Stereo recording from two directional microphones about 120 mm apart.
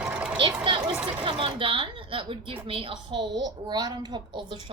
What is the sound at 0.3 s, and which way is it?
A woman's voice, 45° right (ahead or behind).